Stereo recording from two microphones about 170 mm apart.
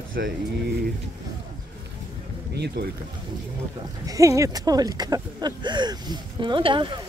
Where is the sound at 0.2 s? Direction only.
70° right (ahead or behind).